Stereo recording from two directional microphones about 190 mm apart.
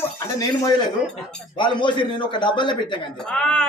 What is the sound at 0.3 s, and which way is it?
Speech, 20° left (ahead or behind).